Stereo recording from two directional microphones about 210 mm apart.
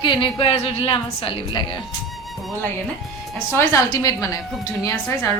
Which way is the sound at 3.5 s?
15° left (ahead or behind).